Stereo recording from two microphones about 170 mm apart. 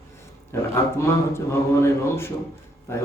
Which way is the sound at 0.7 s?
15° left (ahead or behind).